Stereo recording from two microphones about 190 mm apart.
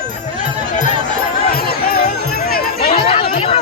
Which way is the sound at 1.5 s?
50° left (ahead or behind).